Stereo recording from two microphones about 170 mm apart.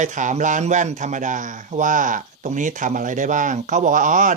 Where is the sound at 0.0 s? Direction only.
45° right (ahead or behind).